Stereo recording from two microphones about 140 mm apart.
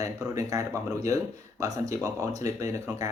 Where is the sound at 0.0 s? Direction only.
25° right (ahead or behind).